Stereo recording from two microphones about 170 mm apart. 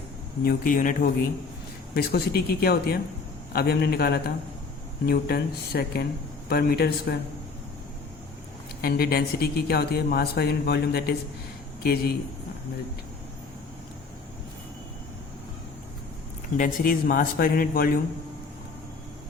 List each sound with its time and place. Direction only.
0.4 s speech: 55° left (ahead or behind)
2.0 s speech: 65° left (ahead or behind)
8.8 s speech: 65° left (ahead or behind)
16.6 s speech: 55° left (ahead or behind)